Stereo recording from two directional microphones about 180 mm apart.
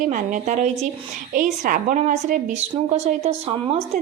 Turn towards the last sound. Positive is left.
turn(degrees=-35)  # may be behind; listen again after turning